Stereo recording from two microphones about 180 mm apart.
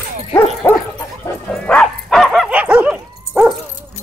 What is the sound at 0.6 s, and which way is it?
Dog, 10° left (ahead or behind).